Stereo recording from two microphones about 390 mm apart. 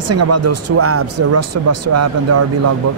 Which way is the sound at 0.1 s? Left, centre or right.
Right.